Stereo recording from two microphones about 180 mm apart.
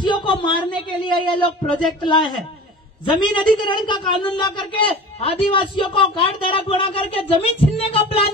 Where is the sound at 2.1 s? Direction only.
25° left (ahead or behind).